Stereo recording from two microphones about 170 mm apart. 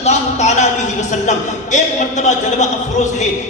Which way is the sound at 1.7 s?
45° left (ahead or behind).